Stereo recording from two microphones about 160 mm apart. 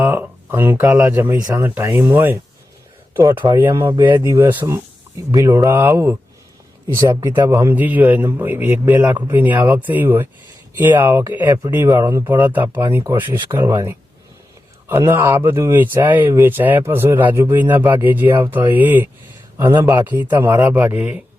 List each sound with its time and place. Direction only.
0.0 s speech: 15° right (ahead or behind)
3.9 s speech: 30° right (ahead or behind)
4.2 s speech: 15° right (ahead or behind)
5.3 s speech: 25° right (ahead or behind)
15.0 s speech: 10° right (ahead or behind)